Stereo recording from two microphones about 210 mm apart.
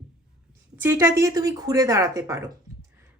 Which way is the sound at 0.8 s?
10° right (ahead or behind).